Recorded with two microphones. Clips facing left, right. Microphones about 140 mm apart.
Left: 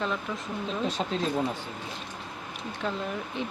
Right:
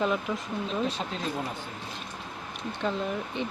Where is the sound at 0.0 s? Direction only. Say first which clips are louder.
Right 4 dB; 10° right (ahead or behind).